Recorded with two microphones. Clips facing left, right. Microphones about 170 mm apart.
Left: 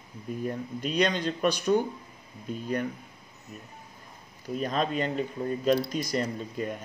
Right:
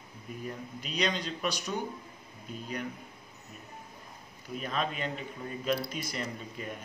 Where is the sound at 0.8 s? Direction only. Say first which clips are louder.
Left 6 dB; 50° left (ahead or behind).